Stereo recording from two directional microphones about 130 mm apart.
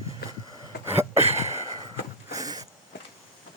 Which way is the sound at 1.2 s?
55° right (ahead or behind).